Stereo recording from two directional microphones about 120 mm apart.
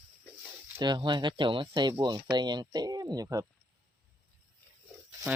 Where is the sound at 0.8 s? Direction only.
40° right (ahead or behind).